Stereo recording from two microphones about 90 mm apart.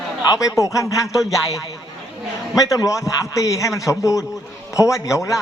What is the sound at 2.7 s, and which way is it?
A man's voice, 40° left (ahead or behind).